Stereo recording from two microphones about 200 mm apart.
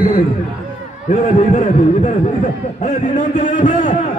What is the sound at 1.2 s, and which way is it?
Speech, 35° left (ahead or behind).